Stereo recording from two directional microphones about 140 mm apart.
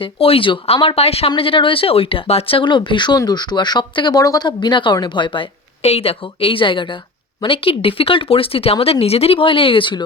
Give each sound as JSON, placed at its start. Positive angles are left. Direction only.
{"t": 0.0, "sound": "speech", "side_deg": 40}